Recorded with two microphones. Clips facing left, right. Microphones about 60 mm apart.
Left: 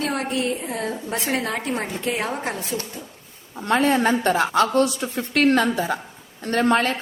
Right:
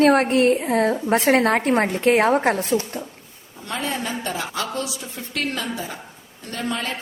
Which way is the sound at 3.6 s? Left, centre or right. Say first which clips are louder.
Left 8 dB; left.